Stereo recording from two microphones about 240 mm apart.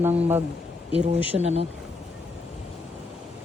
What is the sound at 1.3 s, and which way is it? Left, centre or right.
Speech, right.